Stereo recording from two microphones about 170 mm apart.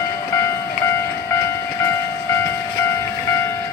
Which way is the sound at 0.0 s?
15° left (ahead or behind).